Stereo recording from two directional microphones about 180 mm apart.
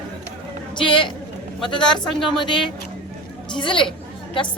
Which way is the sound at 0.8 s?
25° left (ahead or behind).